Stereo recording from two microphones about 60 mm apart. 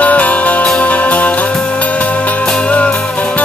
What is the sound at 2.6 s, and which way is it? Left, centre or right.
Music, centre.